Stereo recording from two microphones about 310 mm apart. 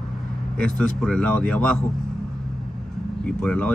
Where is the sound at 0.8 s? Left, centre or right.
Centre.